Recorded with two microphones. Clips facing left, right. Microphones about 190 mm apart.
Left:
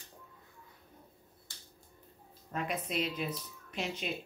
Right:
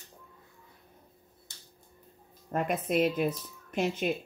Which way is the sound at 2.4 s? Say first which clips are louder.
Right 7 dB; 50° right (ahead or behind).